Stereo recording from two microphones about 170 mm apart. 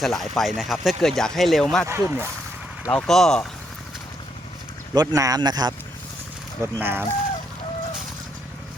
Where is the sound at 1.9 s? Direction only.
15° right (ahead or behind).